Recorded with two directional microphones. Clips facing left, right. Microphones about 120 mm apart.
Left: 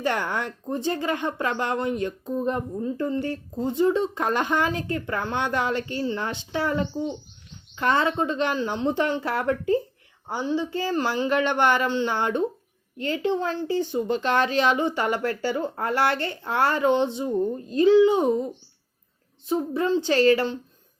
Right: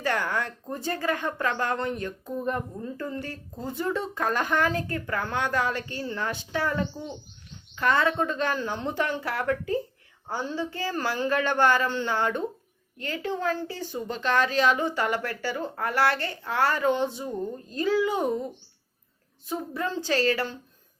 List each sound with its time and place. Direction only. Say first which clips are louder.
0.0 s speech: left 2 dB; 25° left (ahead or behind)
19.5 s speech: left 7 dB; 25° left (ahead or behind)